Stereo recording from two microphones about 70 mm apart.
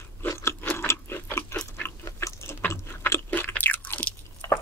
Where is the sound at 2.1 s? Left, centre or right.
Left.